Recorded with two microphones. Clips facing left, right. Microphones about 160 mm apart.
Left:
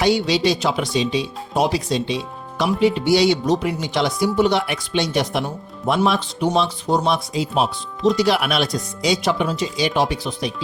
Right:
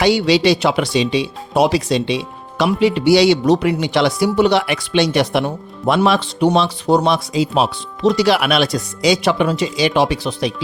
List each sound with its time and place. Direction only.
0.0 s speech: 85° right